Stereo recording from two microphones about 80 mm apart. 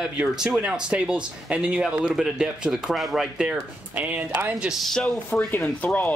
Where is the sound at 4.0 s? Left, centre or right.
Right.